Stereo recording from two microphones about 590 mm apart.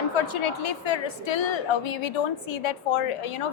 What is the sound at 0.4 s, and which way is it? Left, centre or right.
A woman's voice, left.